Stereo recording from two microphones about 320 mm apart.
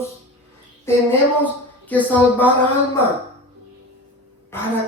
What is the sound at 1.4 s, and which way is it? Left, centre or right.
A man's voice, centre.